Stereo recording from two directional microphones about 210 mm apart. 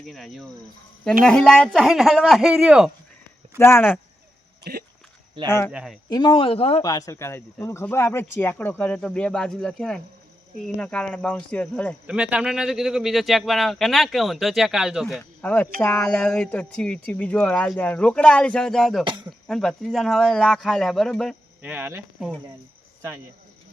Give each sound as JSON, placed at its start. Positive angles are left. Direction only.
{"t": 0.0, "sound": "speech", "side_deg": 0}
{"t": 3.6, "sound": "speech", "side_deg": 10}
{"t": 5.5, "sound": "speech", "side_deg": 10}
{"t": 5.7, "sound": "speech", "side_deg": 0}
{"t": 6.1, "sound": "speech", "side_deg": 20}
{"t": 6.8, "sound": "speech", "side_deg": 15}
{"t": 12.0, "sound": "speech", "side_deg": -5}